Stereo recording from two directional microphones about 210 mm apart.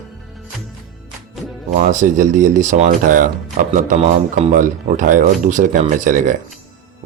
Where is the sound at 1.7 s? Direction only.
35° right (ahead or behind).